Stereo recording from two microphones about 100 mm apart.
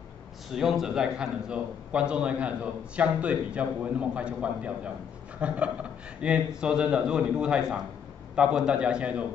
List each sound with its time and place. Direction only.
0.5 s a man's voice: 5° right (ahead or behind)